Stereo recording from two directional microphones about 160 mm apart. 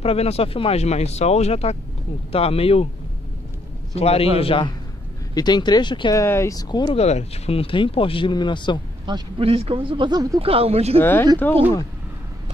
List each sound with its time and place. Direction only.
0.0 s speech: 40° left (ahead or behind)
3.9 s speech: 40° left (ahead or behind)
6.2 s speech: 15° left (ahead or behind)
7.0 s speech: 40° left (ahead or behind)
9.0 s speech: 30° right (ahead or behind)
10.4 s speech: 35° right (ahead or behind)
11.0 s speech: 10° left (ahead or behind)